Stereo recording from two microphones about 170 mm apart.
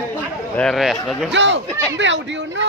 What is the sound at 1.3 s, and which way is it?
Speech, 90° right.